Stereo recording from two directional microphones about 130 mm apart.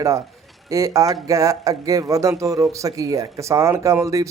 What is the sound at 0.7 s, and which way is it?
Speech, 25° right (ahead or behind).